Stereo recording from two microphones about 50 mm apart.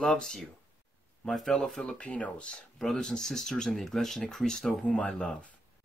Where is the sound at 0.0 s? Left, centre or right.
Centre.